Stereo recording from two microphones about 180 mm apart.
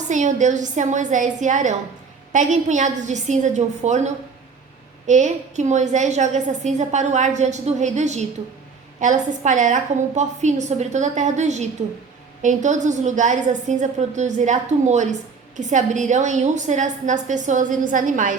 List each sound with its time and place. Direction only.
0.1 s a woman's voice: 45° right (ahead or behind)